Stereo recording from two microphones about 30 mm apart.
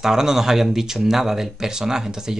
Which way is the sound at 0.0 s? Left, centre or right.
Centre.